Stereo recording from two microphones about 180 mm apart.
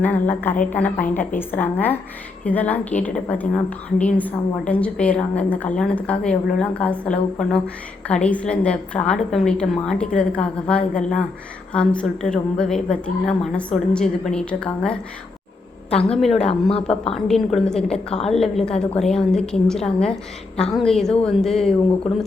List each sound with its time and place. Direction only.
0.0 s a woman's voice: 10° left (ahead or behind)
16.0 s a woman's voice: 5° left (ahead or behind)
16.4 s a woman's voice: 35° left (ahead or behind)
17.2 s a woman's voice: 5° left (ahead or behind)